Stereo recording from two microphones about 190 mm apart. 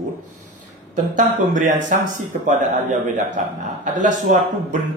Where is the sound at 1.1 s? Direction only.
40° right (ahead or behind).